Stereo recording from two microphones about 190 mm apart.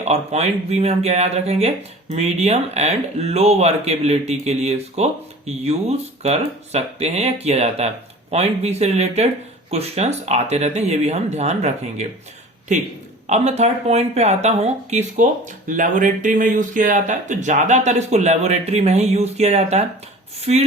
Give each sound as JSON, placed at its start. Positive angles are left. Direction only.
{"t": 0.0, "sound": "speech", "side_deg": -35}